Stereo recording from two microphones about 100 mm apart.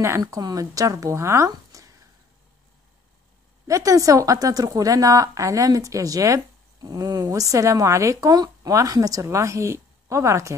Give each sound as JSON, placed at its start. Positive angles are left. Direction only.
{"t": 0.2, "sound": "a woman's voice", "side_deg": -40}
{"t": 3.6, "sound": "a woman's voice", "side_deg": -35}